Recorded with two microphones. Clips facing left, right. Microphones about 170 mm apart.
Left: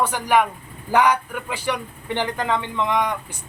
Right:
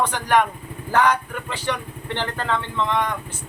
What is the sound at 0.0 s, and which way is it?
Speech, 10° left (ahead or behind).